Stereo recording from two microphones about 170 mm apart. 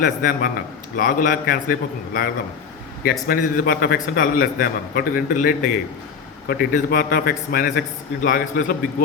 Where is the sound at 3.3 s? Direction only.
55° left (ahead or behind).